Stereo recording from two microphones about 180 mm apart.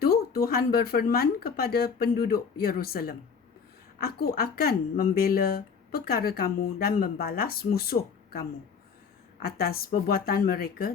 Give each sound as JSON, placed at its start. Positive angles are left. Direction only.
{"t": 0.0, "sound": "speech", "side_deg": 60}